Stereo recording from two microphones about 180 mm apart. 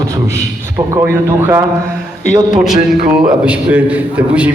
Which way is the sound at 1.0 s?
15° right (ahead or behind).